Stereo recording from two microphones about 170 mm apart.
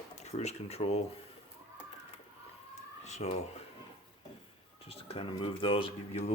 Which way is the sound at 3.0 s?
40° left (ahead or behind).